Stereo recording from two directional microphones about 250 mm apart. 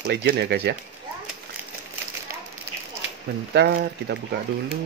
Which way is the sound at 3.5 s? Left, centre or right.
Right.